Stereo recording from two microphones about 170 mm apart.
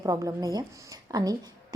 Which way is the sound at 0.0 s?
20° right (ahead or behind).